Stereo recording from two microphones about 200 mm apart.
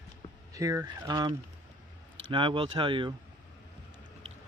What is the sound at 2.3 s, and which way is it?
Speech, 25° right (ahead or behind).